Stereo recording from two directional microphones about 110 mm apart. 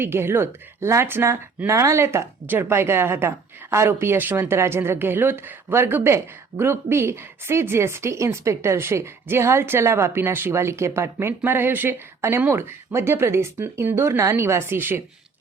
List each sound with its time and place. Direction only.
0.0 s speech: 20° right (ahead or behind)